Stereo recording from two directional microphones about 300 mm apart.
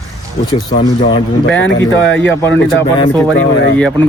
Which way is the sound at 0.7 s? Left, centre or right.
Left.